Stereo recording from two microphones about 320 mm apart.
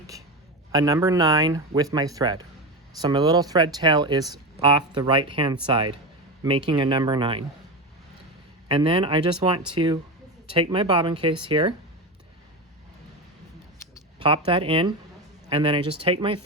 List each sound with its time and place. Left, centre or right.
0.7 s speech: centre
8.6 s speech: centre
14.2 s speech: centre